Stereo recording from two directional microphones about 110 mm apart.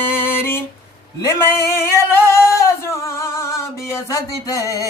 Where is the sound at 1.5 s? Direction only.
25° left (ahead or behind).